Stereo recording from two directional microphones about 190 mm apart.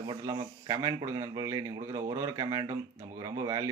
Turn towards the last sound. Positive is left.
turn(degrees=-15)  # may be behind; listen again after turning